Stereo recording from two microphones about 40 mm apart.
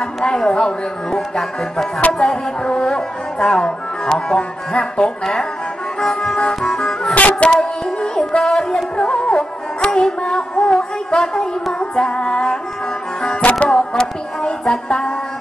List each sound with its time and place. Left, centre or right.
0.2 s music: centre
5.9 s music: centre
7.2 s music: left
7.5 s music: left
13.7 s music: centre